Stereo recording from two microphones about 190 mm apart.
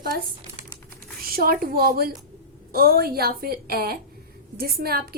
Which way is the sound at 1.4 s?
50° right (ahead or behind).